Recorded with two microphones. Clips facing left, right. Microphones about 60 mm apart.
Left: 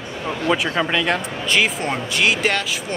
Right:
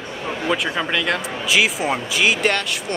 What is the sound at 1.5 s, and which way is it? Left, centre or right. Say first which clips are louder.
Speech: right 1 dB; centre.